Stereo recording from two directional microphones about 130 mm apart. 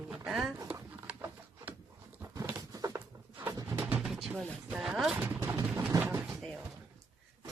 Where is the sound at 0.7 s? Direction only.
10° right (ahead or behind).